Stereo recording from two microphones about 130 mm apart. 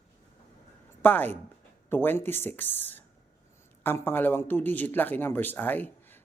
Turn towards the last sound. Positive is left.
turn(degrees=15)  # may be behind; listen again after turning